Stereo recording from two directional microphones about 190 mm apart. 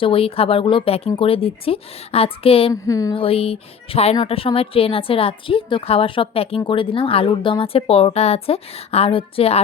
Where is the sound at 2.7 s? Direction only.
15° left (ahead or behind).